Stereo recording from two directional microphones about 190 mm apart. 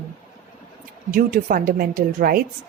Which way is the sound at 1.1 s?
45° right (ahead or behind).